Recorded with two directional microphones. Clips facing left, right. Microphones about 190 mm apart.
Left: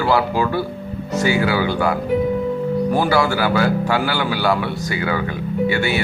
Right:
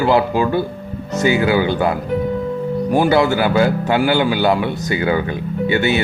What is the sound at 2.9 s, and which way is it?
Speech, 20° right (ahead or behind).